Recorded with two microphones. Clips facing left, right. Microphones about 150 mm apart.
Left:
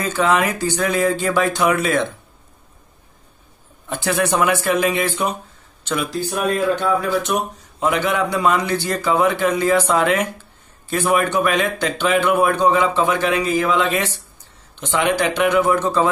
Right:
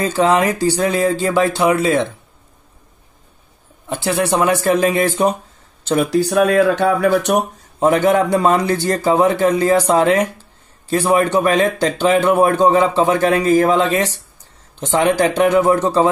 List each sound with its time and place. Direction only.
0.0 s speech: 35° right (ahead or behind)
3.9 s a man's voice: 25° right (ahead or behind); by 5.3 s 40° right (ahead or behind)
6.0 s speech: 70° right (ahead or behind)
7.8 s a man's voice: 40° right (ahead or behind)